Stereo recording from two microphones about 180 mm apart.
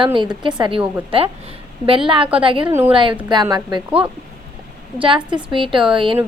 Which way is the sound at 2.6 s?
10° right (ahead or behind).